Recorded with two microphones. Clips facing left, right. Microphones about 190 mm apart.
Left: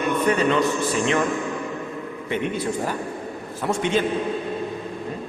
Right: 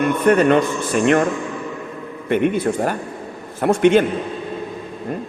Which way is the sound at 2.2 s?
55° right (ahead or behind).